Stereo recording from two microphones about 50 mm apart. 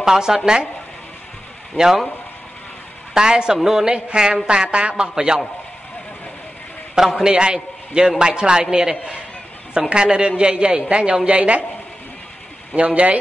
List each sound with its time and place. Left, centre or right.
0.0 s speech: centre
1.8 s speech: centre
3.2 s speech: centre
7.2 s a man's voice: centre
12.7 s a woman's voice: right